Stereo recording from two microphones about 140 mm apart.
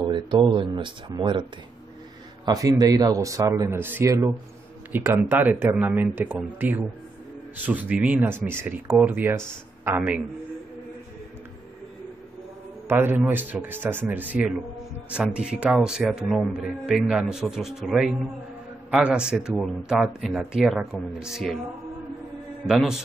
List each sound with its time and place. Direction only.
0.0 s speech: 35° right (ahead or behind)
2.4 s speech: 25° right (ahead or behind)
12.8 s speech: 15° right (ahead or behind)
22.7 s speech: 5° right (ahead or behind)